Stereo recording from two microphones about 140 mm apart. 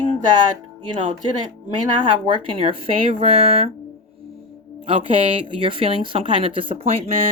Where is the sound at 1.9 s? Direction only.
35° right (ahead or behind).